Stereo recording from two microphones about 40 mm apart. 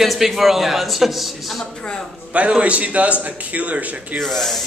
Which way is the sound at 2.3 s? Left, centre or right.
Right.